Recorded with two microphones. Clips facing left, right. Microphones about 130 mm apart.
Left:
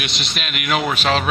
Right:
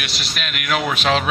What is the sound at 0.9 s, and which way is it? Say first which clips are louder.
Speech: even; 10° right (ahead or behind).